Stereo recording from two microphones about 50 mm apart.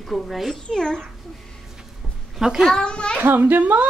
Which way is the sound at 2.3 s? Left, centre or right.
Centre.